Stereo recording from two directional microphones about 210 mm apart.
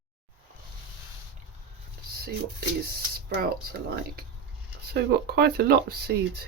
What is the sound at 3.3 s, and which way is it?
Speech, 45° right (ahead or behind).